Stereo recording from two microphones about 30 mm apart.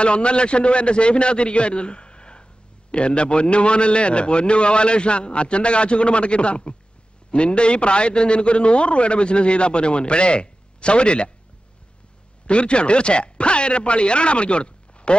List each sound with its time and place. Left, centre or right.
0.0 s a man's voice: left
12.4 s a man's voice: left